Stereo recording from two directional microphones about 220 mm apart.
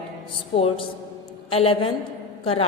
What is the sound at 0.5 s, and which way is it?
A woman's voice, 25° left (ahead or behind).